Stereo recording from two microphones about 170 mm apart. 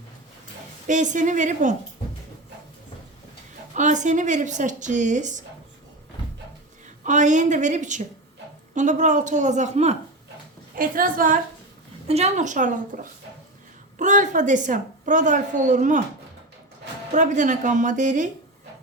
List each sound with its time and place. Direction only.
0.9 s a woman's voice: 45° right (ahead or behind)
3.8 s a woman's voice: 45° right (ahead or behind)
7.0 s a woman's voice: 45° right (ahead or behind)
10.8 s a woman's voice: 55° right (ahead or behind)
12.0 s a woman's voice: 40° right (ahead or behind)
17.1 s a woman's voice: 45° right (ahead or behind)